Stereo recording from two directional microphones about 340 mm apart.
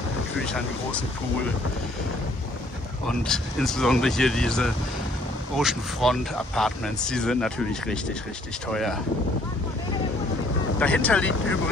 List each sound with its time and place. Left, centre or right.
3.1 s speech: centre
10.8 s speech: centre